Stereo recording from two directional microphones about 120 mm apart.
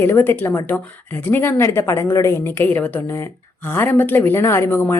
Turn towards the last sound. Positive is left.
turn(degrees=20)  # may be behind; listen again after turning